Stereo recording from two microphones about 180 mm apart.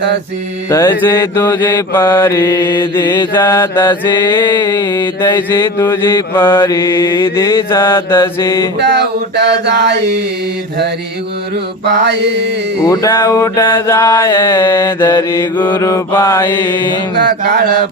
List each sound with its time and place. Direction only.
0.7 s mantra: 15° left (ahead or behind)
3.0 s mantra: 25° left (ahead or behind)
3.4 s mantra: 15° left (ahead or behind)
4.3 s mantra: 25° left (ahead or behind)
5.3 s mantra: 10° left (ahead or behind)
8.8 s a sound: 70° right (ahead or behind)
11.9 s a sound: 70° right (ahead or behind)
12.9 s mantra: 20° left (ahead or behind)
17.2 s mantra: 65° right (ahead or behind)